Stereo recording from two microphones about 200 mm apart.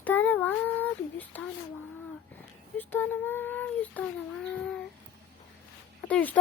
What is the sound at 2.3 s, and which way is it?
Speech, 10° left (ahead or behind).